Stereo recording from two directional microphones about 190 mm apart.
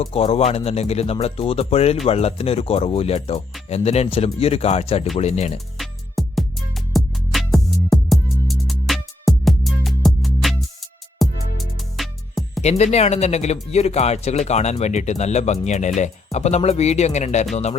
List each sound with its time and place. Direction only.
0.0 s speech: 30° left (ahead or behind)
5.7 s music: centre (ahead or behind)
12.6 s speech: 35° left (ahead or behind)